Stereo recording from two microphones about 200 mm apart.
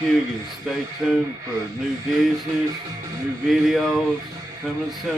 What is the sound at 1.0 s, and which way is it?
Speech, 5° right (ahead or behind).